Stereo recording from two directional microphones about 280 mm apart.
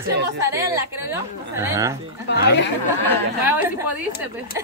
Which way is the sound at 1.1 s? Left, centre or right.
Centre.